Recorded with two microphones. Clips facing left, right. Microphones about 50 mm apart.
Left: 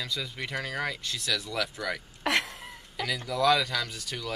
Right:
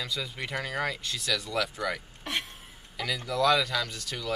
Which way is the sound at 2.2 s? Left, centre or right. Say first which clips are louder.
Left 6 dB; left.